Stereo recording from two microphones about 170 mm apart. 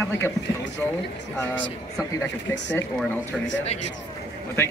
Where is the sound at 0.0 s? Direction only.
15° left (ahead or behind).